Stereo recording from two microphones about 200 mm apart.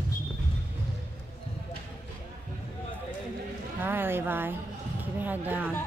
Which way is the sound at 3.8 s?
10° right (ahead or behind).